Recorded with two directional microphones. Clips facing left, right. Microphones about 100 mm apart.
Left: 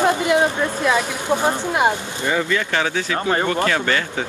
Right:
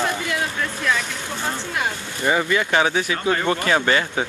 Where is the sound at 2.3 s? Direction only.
20° right (ahead or behind).